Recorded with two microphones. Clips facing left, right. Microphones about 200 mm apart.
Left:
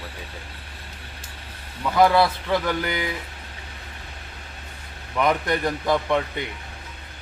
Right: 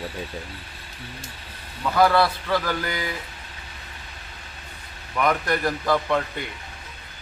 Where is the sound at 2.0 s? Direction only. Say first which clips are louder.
Left 1 dB; 20° left (ahead or behind).